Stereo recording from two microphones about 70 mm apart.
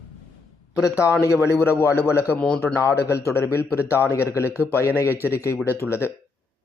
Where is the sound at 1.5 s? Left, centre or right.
Left.